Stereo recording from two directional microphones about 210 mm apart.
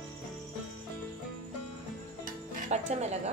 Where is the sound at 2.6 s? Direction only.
30° right (ahead or behind).